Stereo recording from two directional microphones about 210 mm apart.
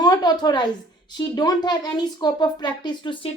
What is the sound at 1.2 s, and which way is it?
A woman's voice, 20° left (ahead or behind).